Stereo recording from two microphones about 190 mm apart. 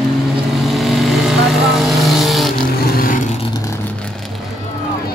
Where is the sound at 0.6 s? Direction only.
Centre (ahead or behind).